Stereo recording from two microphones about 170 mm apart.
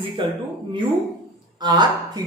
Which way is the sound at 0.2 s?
30° right (ahead or behind).